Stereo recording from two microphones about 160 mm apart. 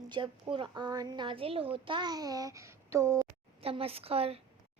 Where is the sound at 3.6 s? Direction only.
35° right (ahead or behind).